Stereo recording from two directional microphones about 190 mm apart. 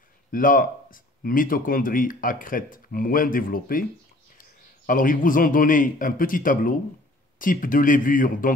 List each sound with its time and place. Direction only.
0.3 s a man's voice: 45° left (ahead or behind)